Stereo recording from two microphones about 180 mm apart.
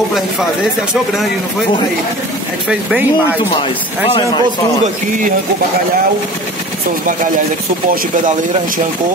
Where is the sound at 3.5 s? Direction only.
30° left (ahead or behind).